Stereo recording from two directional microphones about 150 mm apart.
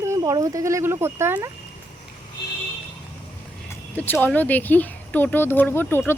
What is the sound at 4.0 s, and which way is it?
Speech, 10° left (ahead or behind).